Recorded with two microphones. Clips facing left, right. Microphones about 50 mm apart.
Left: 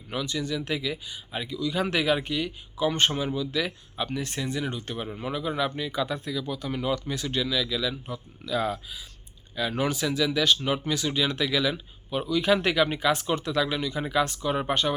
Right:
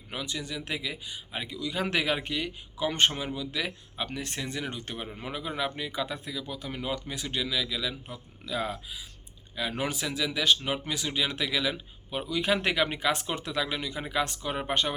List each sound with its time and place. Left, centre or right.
0.1 s speech: right